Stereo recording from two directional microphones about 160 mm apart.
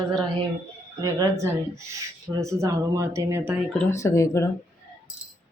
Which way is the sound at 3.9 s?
20° left (ahead or behind).